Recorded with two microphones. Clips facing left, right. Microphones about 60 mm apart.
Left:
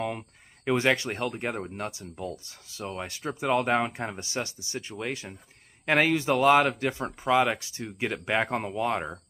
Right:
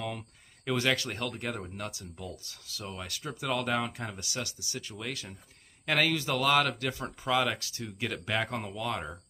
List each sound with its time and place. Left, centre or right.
0.7 s speech: left